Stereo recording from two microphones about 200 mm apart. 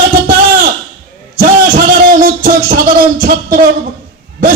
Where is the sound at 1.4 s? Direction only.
45° right (ahead or behind).